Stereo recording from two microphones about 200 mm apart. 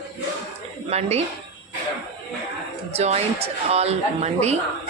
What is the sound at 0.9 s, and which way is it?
Speech, 30° right (ahead or behind).